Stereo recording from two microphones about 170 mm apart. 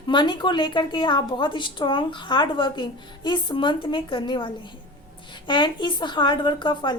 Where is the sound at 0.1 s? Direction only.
25° left (ahead or behind).